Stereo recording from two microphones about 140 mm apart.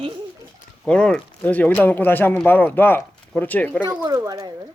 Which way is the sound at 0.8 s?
5° left (ahead or behind).